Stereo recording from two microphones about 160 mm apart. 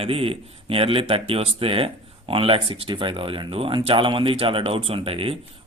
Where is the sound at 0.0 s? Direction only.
35° right (ahead or behind).